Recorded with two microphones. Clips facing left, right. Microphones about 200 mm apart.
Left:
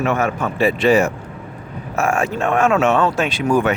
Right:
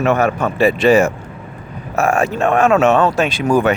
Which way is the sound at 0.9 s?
45° right (ahead or behind).